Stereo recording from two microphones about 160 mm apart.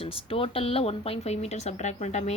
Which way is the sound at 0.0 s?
35° left (ahead or behind).